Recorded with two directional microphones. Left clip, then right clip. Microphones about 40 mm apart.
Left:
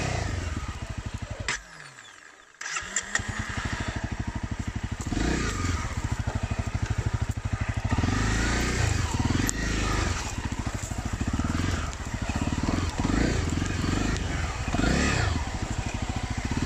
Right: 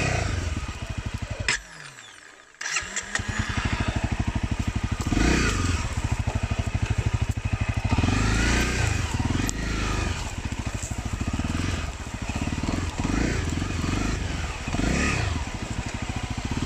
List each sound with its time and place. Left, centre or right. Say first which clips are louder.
0.0 s motorcycle: right 5 dB; centre
2.6 s vehicle: right 3 dB; left
5.1 s motorcycle: right 5 dB; centre
7.6 s vehicle: right 3 dB; centre
11.3 s vehicle: even; centre
12.3 s motorcycle: even; centre
13.5 s vehicle: even; left